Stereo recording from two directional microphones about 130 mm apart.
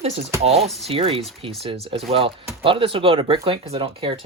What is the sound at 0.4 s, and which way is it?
Speech, 50° right (ahead or behind).